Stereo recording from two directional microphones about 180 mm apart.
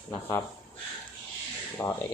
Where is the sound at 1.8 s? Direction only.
10° left (ahead or behind).